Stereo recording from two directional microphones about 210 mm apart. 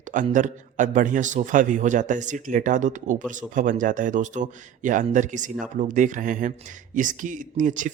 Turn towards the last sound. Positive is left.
turn(degrees=-35)  # may be behind; listen again after turning